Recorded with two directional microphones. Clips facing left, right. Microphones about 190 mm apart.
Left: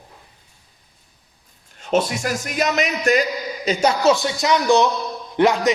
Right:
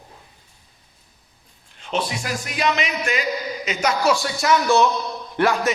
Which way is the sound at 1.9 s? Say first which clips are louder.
Left 5 dB; 45° left (ahead or behind).